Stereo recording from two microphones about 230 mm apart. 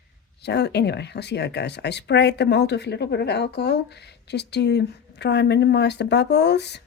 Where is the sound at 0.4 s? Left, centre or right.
Left.